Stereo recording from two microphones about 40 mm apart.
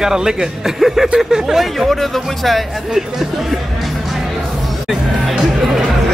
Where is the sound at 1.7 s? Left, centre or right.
Centre.